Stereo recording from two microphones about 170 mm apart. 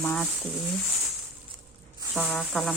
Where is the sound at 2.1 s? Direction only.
Centre (ahead or behind).